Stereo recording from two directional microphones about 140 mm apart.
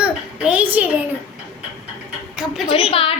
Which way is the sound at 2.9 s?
40° left (ahead or behind).